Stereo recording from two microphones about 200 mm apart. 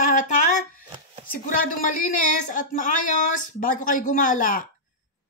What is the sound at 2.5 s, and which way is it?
Speech, 40° left (ahead or behind).